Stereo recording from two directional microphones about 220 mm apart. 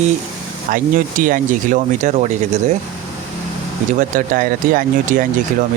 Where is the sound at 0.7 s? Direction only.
40° right (ahead or behind).